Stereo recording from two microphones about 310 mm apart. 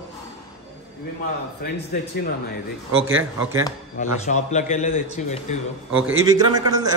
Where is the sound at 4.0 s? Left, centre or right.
Left.